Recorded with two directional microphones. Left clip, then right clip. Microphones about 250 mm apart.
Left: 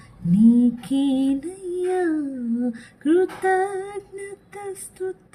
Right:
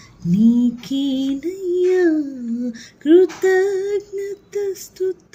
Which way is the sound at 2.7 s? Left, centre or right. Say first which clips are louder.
Right 8 dB; centre.